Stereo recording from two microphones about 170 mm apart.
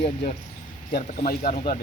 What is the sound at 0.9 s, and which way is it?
Speech, 55° left (ahead or behind).